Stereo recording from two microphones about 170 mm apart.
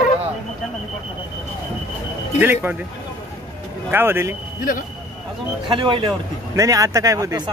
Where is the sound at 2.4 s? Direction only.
10° right (ahead or behind).